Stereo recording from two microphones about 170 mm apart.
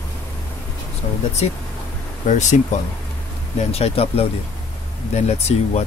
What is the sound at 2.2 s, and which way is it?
Speech, 45° left (ahead or behind).